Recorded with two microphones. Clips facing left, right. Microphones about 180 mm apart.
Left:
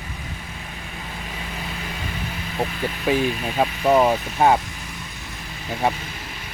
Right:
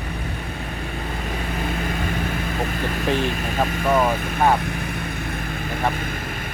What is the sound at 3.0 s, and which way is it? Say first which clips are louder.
Speech: left 3 dB; 10° left (ahead or behind).